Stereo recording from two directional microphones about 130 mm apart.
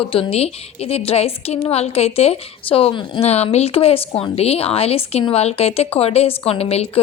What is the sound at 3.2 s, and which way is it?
A woman's voice, 55° left (ahead or behind).